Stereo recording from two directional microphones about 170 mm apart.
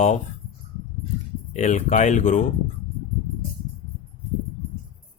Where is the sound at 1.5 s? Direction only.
45° left (ahead or behind).